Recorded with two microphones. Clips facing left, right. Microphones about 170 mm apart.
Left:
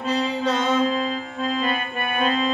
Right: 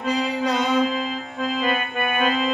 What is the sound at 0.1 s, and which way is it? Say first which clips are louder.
Music: even; 10° right (ahead or behind).